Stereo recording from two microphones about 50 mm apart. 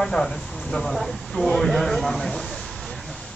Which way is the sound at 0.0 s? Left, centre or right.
Centre.